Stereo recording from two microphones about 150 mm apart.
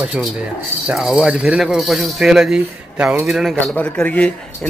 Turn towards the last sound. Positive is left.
turn(degrees=10)  # may be behind; listen again after turning